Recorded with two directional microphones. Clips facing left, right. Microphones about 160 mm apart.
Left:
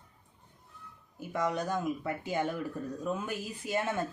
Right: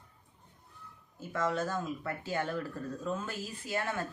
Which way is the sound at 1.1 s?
15° left (ahead or behind).